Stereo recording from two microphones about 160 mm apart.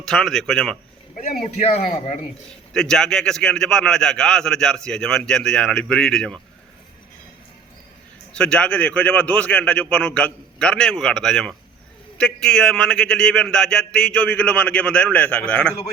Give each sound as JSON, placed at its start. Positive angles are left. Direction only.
{"t": 0.0, "sound": "a man's voice", "side_deg": 5}
{"t": 1.1, "sound": "a man's voice", "side_deg": 50}
{"t": 1.8, "sound": "a man's voice", "side_deg": 50}
{"t": 2.7, "sound": "a man's voice", "side_deg": 5}
{"t": 8.3, "sound": "a man's voice", "side_deg": 5}